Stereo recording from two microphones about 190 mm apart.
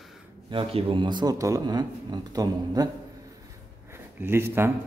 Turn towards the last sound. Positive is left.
turn(degrees=-10)  # may be behind; listen again after turning